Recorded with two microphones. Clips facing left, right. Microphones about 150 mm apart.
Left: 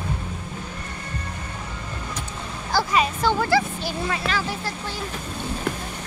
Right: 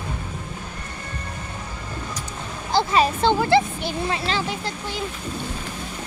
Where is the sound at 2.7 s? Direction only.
25° right (ahead or behind).